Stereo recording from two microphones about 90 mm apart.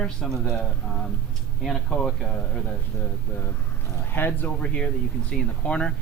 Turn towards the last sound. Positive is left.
turn(degrees=10)  # may be behind; listen again after turning